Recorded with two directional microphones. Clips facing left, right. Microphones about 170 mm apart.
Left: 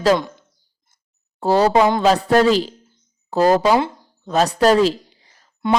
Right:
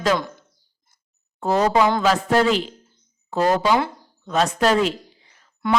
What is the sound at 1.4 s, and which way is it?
Speech, 35° left (ahead or behind).